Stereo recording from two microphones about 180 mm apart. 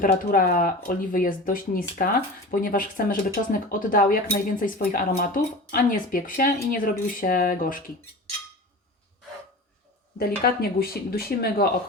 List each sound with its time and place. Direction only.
0.0 s speech: 50° left (ahead or behind)
10.2 s speech: 55° left (ahead or behind)